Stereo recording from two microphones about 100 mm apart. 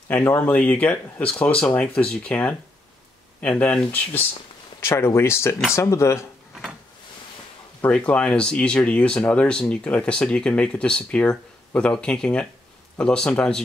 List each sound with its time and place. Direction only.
0.1 s speech: 20° left (ahead or behind)
4.7 s speech: 25° left (ahead or behind)
7.8 s speech: 10° left (ahead or behind)